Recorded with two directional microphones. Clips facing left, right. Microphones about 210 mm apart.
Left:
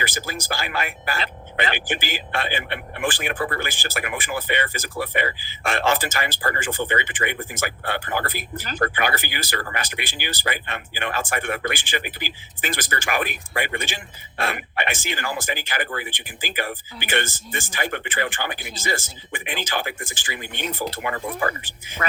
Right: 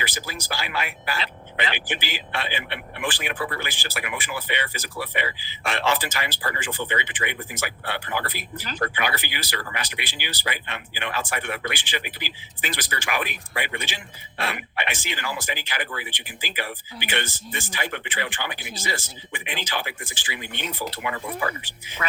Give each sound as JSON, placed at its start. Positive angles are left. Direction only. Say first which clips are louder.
{"t": 0.0, "sound": "speech", "louder": "left 4 dB", "side_deg": 50}